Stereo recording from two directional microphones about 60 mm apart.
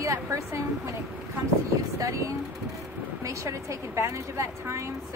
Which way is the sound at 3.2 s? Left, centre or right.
Right.